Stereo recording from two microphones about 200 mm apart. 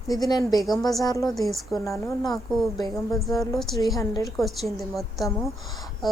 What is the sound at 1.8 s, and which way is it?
Speech, 15° left (ahead or behind).